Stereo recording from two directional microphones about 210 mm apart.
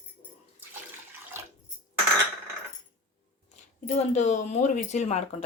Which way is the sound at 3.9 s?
35° left (ahead or behind).